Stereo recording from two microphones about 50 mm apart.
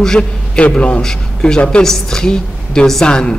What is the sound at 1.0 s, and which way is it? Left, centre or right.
Speech, centre.